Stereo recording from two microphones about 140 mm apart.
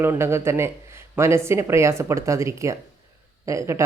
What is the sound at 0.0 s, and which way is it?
Speech, 15° right (ahead or behind).